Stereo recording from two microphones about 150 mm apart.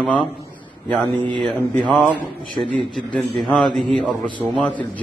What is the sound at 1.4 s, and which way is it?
Speech, 5° left (ahead or behind).